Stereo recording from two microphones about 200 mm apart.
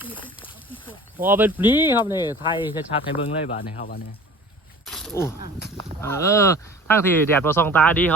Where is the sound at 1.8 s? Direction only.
20° left (ahead or behind).